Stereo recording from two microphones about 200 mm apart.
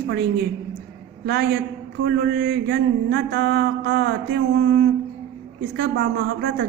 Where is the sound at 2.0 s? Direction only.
55° right (ahead or behind).